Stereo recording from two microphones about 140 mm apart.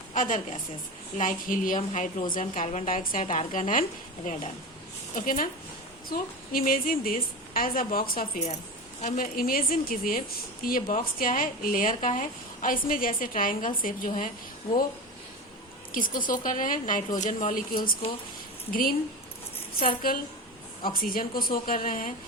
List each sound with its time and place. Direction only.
0.1 s a woman's voice: 65° left (ahead or behind)
1.9 s a woman's voice: 65° left (ahead or behind)
4.2 s a woman's voice: 80° left
9.0 s a woman's voice: 60° left (ahead or behind); by 14.1 s 80° left
15.9 s a woman's voice: 80° left